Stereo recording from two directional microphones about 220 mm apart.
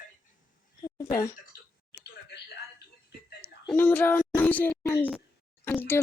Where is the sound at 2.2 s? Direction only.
50° left (ahead or behind).